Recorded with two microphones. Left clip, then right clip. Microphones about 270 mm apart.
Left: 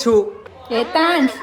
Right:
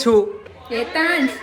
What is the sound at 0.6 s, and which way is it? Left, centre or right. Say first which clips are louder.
Speech: left 4 dB; left.